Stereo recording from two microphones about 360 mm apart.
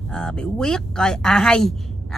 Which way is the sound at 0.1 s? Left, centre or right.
Centre.